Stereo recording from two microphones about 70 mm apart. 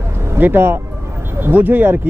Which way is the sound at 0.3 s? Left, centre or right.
Right.